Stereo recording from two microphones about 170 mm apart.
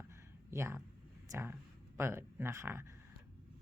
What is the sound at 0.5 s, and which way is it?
Speech, 15° right (ahead or behind).